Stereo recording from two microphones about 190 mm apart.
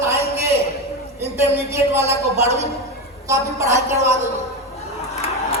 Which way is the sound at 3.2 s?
15° right (ahead or behind).